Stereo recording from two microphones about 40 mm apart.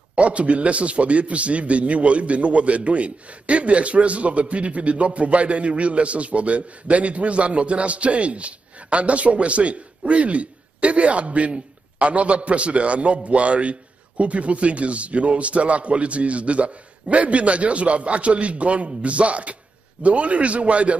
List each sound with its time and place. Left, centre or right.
0.1 s a man's voice: right